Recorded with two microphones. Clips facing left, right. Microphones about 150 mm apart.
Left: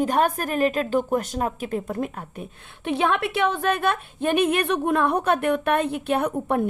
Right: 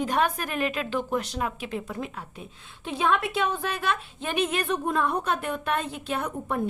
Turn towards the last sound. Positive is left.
turn(degrees=60)  # may be behind; listen again after turning